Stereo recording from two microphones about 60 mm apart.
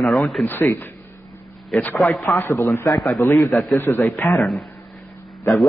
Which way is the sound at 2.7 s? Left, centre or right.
Left.